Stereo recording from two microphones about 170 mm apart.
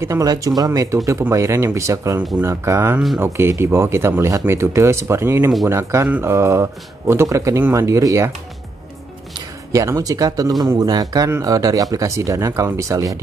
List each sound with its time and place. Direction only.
0.0 s speech: 20° right (ahead or behind)
9.3 s speech: 20° right (ahead or behind)